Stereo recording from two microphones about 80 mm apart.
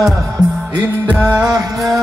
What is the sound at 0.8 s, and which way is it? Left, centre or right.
Music, right.